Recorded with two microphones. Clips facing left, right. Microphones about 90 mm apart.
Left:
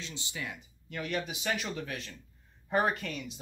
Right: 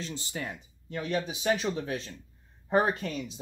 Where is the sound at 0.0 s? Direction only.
40° right (ahead or behind).